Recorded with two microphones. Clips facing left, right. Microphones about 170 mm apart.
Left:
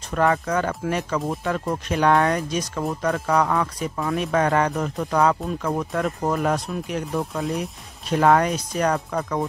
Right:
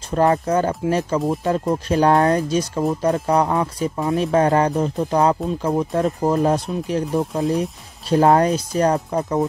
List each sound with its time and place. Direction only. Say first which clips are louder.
0.1 s speech: right 4 dB; 30° right (ahead or behind)